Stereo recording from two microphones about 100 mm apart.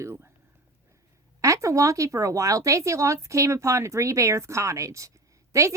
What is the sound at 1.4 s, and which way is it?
A woman's voice, 30° right (ahead or behind).